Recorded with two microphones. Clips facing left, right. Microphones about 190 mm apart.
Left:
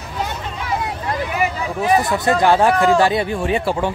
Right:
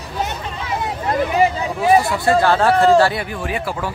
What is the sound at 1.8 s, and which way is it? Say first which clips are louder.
Speech: right 2 dB; 20° left (ahead or behind).